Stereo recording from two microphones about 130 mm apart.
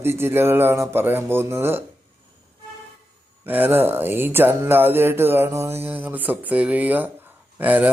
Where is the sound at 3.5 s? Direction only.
15° right (ahead or behind).